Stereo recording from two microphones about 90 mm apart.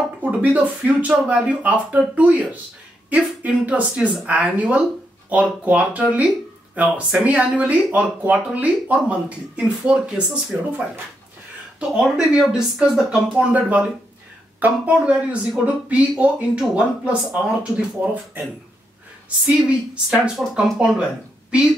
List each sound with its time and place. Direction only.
0.2 s speech: 15° right (ahead or behind)
11.9 s speech: 10° right (ahead or behind)
13.5 s speech: 15° right (ahead or behind)